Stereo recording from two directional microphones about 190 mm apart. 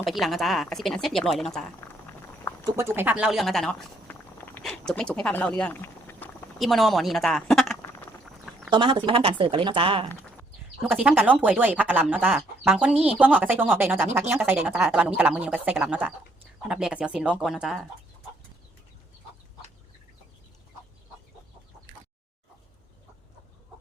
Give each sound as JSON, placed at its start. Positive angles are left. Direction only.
{"t": 0.0, "sound": "speech", "side_deg": 0}
{"t": 2.6, "sound": "speech", "side_deg": -15}
{"t": 8.2, "sound": "a sound", "side_deg": 0}
{"t": 8.7, "sound": "speech", "side_deg": -25}
{"t": 10.8, "sound": "speech", "side_deg": -5}